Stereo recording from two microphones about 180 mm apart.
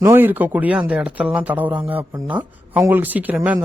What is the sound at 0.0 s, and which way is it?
Speech, 10° right (ahead or behind).